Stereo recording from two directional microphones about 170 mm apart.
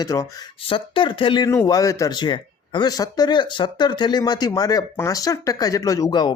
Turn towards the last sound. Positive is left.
turn(degrees=20)  # may be behind; listen again after turning